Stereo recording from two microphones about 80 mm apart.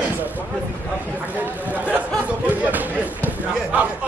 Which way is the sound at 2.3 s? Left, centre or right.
Centre.